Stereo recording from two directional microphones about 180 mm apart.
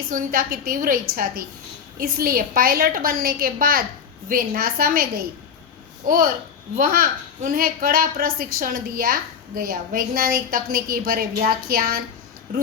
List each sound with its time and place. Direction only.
0.1 s a woman's voice: 50° right (ahead or behind)
6.1 s a woman's voice: 50° right (ahead or behind)